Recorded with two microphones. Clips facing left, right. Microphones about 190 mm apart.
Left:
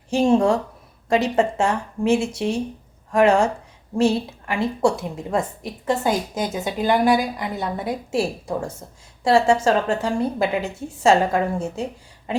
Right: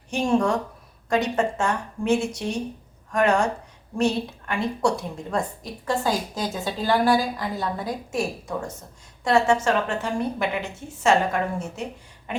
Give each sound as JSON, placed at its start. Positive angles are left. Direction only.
{"t": 0.1, "sound": "a woman's voice", "side_deg": 30}